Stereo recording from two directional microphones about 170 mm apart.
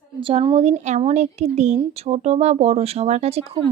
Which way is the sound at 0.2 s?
30° right (ahead or behind).